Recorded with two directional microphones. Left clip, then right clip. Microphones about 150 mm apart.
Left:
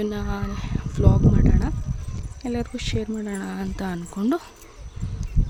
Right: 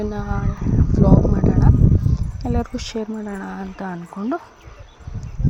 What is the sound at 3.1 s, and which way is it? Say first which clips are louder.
Speech: right 1 dB; 30° left (ahead or behind).